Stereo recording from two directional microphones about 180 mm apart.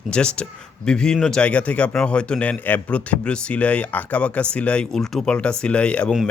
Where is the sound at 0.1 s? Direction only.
5° left (ahead or behind).